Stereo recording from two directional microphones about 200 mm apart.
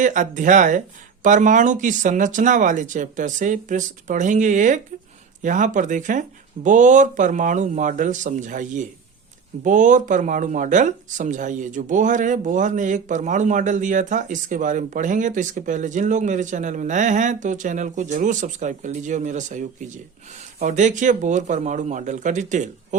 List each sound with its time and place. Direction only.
0.0 s speech: 40° right (ahead or behind)